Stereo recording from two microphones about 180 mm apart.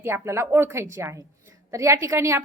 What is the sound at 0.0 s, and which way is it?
A woman's voice, 15° right (ahead or behind).